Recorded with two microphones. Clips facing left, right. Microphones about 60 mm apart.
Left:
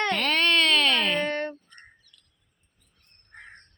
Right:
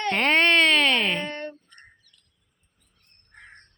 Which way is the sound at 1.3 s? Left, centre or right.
Left.